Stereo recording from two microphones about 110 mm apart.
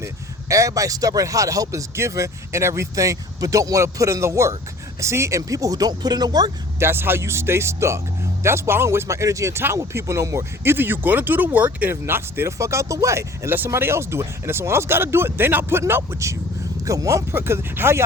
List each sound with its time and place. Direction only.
0.0 s speech: 30° right (ahead or behind)
6.7 s speech: 20° right (ahead or behind)